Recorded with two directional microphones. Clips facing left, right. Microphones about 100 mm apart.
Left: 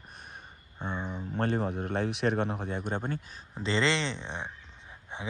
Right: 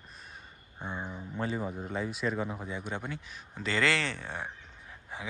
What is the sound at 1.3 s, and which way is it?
Speech, 60° left (ahead or behind).